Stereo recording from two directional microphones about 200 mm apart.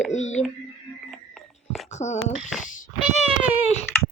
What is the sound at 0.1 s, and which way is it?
Speech, 35° left (ahead or behind).